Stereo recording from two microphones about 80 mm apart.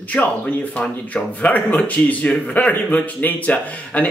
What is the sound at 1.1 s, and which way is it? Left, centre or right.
Speech, centre.